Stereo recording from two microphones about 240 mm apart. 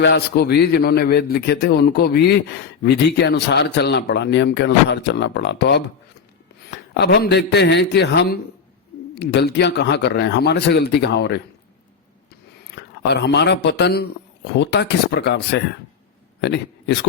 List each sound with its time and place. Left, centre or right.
0.0 s a man's voice: left
12.7 s speech: left